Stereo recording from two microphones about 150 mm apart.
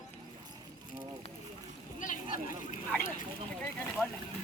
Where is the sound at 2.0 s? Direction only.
65° left (ahead or behind).